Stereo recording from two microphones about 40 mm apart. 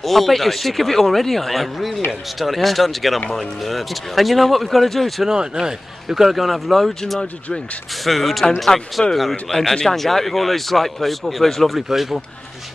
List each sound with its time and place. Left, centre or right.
0.0 s speech: centre
5.2 s speech: centre
6.0 s speech: centre
7.9 s speech: centre